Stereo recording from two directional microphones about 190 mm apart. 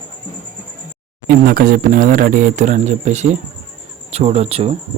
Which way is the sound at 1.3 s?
50° right (ahead or behind).